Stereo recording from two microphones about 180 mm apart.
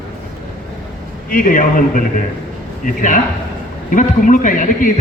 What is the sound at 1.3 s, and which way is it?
A man's voice, 50° left (ahead or behind).